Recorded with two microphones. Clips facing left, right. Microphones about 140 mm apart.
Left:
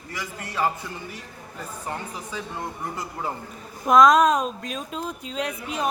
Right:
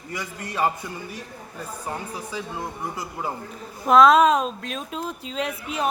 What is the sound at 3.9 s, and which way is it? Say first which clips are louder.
Speech: right 1 dB; 5° right (ahead or behind).